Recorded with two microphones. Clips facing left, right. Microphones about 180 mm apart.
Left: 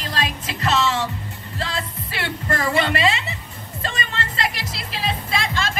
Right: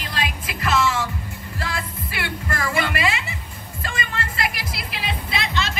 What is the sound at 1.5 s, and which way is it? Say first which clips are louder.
Music: left 2 dB; 30° left (ahead or behind).